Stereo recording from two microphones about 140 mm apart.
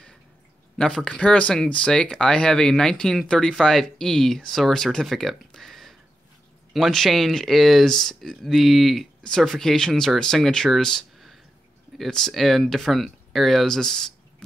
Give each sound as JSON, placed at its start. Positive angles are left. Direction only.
{"t": 0.7, "sound": "speech", "side_deg": 5}